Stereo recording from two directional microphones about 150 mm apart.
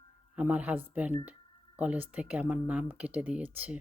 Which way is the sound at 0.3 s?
10° right (ahead or behind).